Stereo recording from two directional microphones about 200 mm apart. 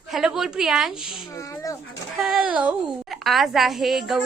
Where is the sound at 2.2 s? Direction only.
5° right (ahead or behind).